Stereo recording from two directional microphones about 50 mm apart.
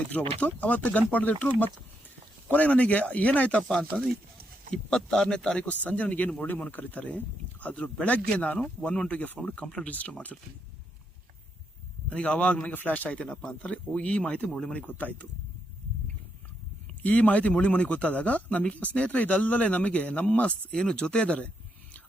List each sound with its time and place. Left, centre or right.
0.1 s speech: left
3.7 s speech: centre
5.6 s speech: left
9.5 s speech: left
12.0 s speech: left
17.0 s speech: left